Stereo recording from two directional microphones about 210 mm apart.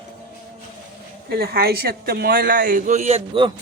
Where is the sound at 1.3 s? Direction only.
50° right (ahead or behind); by 3.5 s 25° right (ahead or behind).